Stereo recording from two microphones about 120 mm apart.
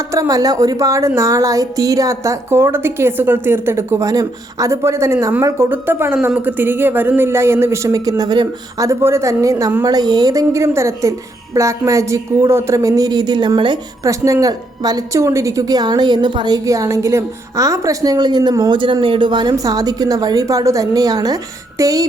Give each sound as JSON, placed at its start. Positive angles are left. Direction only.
{"t": 0.1, "sound": "a woman's voice", "side_deg": -30}
{"t": 14.0, "sound": "a woman's voice", "side_deg": -25}
{"t": 16.6, "sound": "a woman's voice", "side_deg": -25}